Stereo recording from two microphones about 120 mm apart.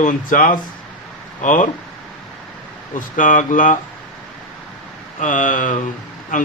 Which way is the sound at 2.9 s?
90° left.